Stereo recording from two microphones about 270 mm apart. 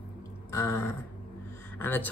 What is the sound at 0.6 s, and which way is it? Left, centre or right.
Speech, centre.